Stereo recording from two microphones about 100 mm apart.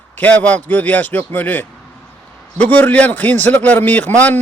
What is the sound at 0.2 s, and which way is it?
A man's voice, 15° left (ahead or behind).